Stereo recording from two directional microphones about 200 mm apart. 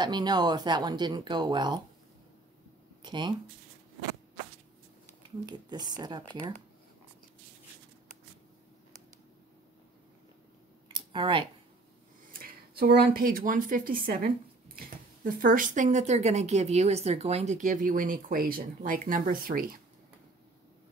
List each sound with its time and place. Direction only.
0.0 s speech: 20° right (ahead or behind)
3.0 s speech: 20° right (ahead or behind)
5.4 s speech: 20° right (ahead or behind)
10.9 s a sound: 25° right (ahead or behind)
12.3 s speech: 45° right (ahead or behind)